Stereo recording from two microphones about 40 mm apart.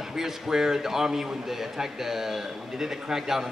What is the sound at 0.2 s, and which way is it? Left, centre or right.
A man's voice, centre.